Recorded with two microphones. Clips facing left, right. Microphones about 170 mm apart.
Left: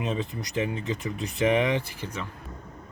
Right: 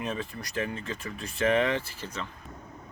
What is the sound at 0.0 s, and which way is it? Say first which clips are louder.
Speech: left 4 dB; 20° left (ahead or behind).